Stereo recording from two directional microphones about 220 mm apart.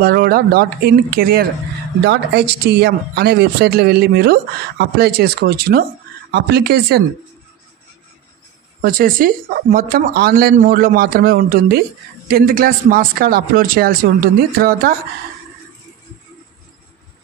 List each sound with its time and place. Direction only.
0.0 s speech: 45° right (ahead or behind)
8.8 s speech: 40° right (ahead or behind)